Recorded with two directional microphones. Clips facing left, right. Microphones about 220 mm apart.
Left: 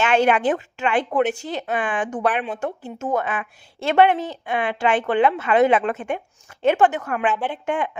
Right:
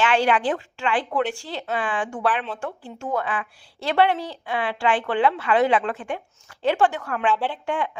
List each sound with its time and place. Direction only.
0.1 s a woman's voice: 20° left (ahead or behind)